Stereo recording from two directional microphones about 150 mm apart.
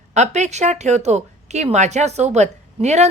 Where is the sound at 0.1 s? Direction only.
50° right (ahead or behind).